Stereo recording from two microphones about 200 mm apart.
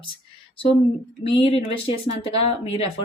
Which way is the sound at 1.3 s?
25° left (ahead or behind).